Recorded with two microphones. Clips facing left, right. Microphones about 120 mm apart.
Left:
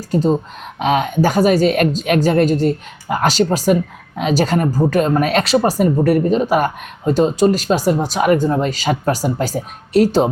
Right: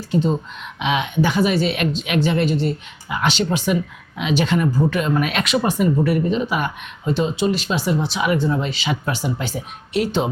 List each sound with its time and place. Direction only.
0.1 s a woman's voice: 40° left (ahead or behind)